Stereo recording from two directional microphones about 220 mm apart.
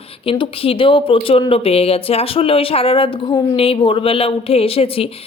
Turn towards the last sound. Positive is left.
turn(degrees=25)  # may be behind; listen again after turning